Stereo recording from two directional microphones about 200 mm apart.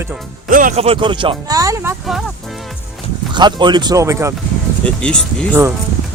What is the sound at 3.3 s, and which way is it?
Speech, 20° right (ahead or behind).